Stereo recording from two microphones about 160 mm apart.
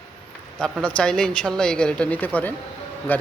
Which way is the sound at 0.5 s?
5° left (ahead or behind).